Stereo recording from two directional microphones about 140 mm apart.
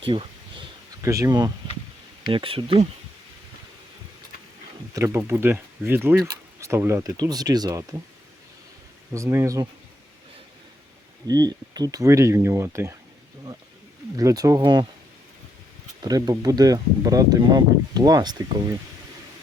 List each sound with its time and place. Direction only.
0.1 s a sound: 40° right (ahead or behind)
1.0 s speech: 20° right (ahead or behind)
2.2 s speech: 40° right (ahead or behind)
4.9 s speech: 20° right (ahead or behind)
9.1 s speech: 20° right (ahead or behind)
11.3 s speech: 30° right (ahead or behind)
14.2 s speech: 25° right (ahead or behind)
16.0 s speech: 30° right (ahead or behind)